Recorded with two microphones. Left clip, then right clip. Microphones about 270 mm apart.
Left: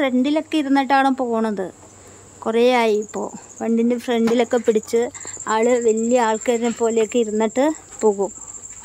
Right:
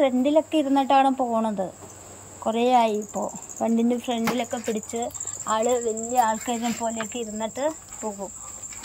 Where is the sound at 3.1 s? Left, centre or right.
Centre.